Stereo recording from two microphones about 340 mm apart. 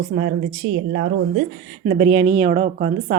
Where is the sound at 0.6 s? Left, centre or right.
Right.